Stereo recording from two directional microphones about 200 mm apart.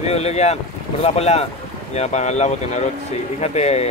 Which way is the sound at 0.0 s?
30° left (ahead or behind).